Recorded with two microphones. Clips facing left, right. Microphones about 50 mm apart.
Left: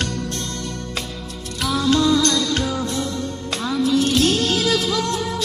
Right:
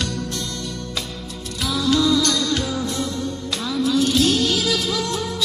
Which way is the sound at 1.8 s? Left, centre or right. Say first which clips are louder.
Left 1 dB; left.